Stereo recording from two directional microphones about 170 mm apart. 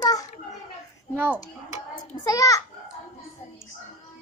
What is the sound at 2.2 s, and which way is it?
Speech, 20° left (ahead or behind).